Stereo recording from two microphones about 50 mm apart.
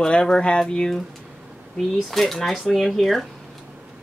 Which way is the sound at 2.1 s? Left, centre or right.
Centre.